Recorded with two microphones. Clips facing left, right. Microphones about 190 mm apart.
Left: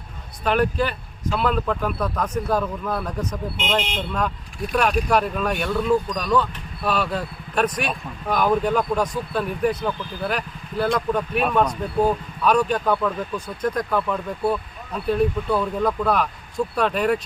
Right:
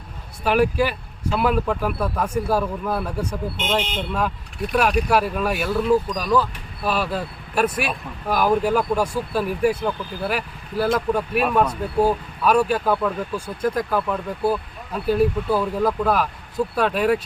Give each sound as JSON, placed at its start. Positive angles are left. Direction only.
{"t": 0.4, "sound": "a man's voice", "side_deg": -5}